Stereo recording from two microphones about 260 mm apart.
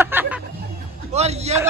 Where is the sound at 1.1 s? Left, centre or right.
Right.